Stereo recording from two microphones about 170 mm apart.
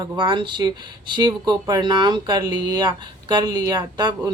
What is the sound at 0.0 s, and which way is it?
Speech, 25° right (ahead or behind).